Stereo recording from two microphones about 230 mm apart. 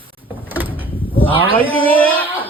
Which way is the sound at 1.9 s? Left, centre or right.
Centre.